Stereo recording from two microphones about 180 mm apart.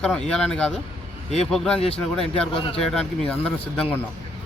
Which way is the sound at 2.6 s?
30° left (ahead or behind).